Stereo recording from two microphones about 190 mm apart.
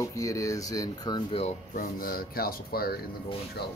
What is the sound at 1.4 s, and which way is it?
Speech, 50° left (ahead or behind).